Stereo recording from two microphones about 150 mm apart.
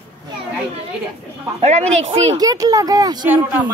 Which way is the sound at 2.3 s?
25° right (ahead or behind).